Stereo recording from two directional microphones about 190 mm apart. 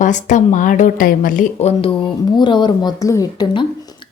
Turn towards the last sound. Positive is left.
turn(degrees=20)  # may be behind; listen again after turning